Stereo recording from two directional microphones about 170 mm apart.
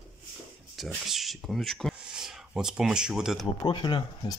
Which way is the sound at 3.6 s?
25° left (ahead or behind).